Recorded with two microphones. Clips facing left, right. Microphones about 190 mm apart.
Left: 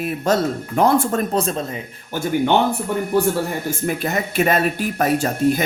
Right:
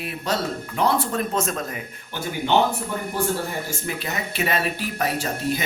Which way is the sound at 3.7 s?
50° left (ahead or behind).